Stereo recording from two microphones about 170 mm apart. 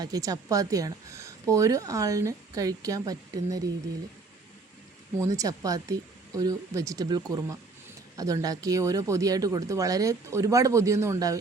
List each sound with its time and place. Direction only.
0.0 s speech: 20° right (ahead or behind)
5.2 s speech: 20° right (ahead or behind)